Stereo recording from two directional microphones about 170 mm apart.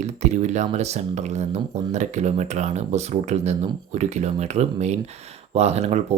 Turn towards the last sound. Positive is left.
turn(degrees=-40)  # may be behind; listen again after turning